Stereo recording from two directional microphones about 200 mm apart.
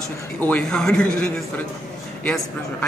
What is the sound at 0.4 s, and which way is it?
Speech, 5° left (ahead or behind).